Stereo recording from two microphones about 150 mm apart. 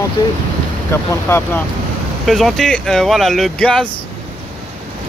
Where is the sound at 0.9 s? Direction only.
15° left (ahead or behind).